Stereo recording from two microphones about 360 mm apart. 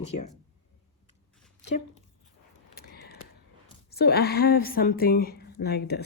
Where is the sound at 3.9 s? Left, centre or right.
Left.